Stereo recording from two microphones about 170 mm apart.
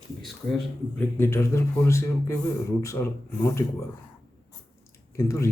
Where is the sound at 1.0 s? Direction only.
15° left (ahead or behind).